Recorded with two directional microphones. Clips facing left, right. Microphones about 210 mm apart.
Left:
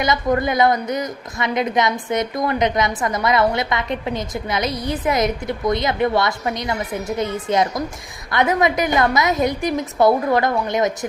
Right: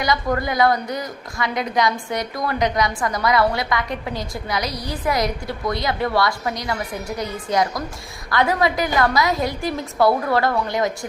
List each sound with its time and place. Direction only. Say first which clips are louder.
0.0 s a woman's voice: left 3 dB; 20° left (ahead or behind)